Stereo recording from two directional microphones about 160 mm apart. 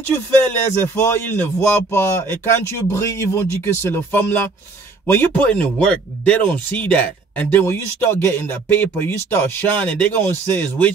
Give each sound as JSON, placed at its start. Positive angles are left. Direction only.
{"t": 0.7, "sound": "speech", "side_deg": 15}